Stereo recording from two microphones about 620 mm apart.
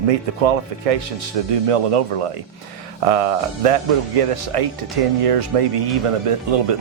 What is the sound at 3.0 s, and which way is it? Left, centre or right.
Speech, right.